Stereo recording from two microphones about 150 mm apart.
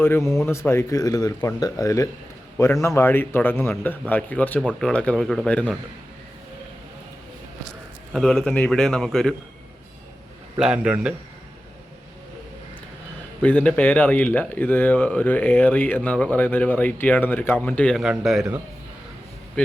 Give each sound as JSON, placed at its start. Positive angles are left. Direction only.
{"t": 0.0, "sound": "a man's voice", "side_deg": 15}
{"t": 8.1, "sound": "a man's voice", "side_deg": 0}
{"t": 10.6, "sound": "a man's voice", "side_deg": -5}
{"t": 13.4, "sound": "speech", "side_deg": 10}
{"t": 19.6, "sound": "speech", "side_deg": 10}